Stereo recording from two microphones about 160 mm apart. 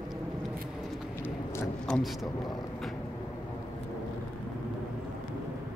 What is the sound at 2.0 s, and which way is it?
Speech, centre (ahead or behind).